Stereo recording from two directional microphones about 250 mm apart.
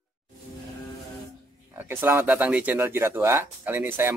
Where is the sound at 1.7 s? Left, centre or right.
Centre.